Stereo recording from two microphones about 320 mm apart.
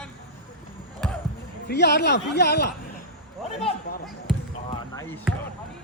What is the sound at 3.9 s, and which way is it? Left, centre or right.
Speech, left.